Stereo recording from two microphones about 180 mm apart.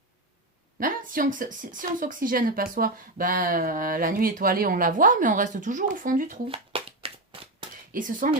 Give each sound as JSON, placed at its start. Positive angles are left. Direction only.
{"t": 0.8, "sound": "speech", "side_deg": -50}
{"t": 6.5, "sound": "shuffling cards", "side_deg": -30}
{"t": 7.9, "sound": "speech", "side_deg": -45}